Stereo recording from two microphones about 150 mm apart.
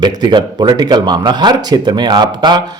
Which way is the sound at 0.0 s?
30° right (ahead or behind).